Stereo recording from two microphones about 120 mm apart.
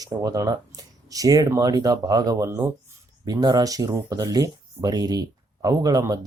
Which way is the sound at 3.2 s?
35° right (ahead or behind).